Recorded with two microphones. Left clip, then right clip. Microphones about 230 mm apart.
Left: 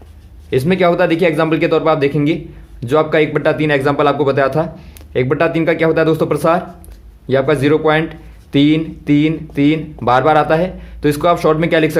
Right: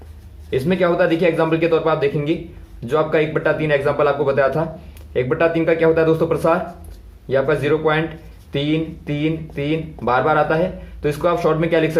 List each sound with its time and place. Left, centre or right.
0.5 s speech: left